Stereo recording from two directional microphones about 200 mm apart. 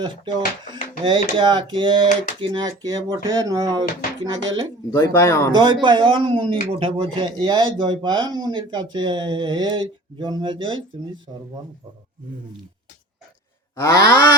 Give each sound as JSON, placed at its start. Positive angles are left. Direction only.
{"t": 0.0, "sound": "speech", "side_deg": -25}
{"t": 4.9, "sound": "speech", "side_deg": 15}
{"t": 5.5, "sound": "speech", "side_deg": -20}
{"t": 13.7, "sound": "speech", "side_deg": 15}